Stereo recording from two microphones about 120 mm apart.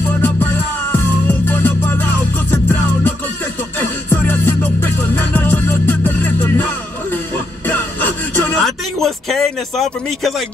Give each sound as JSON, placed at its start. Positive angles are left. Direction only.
{"t": 0.2, "sound": "music", "side_deg": 15}
{"t": 8.6, "sound": "speech", "side_deg": 0}